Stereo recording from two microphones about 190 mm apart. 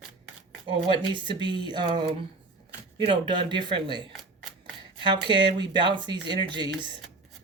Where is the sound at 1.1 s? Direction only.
25° right (ahead or behind).